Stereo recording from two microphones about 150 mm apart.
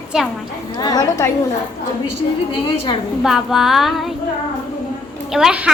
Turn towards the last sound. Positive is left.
turn(degrees=-5)  # may be behind; listen again after turning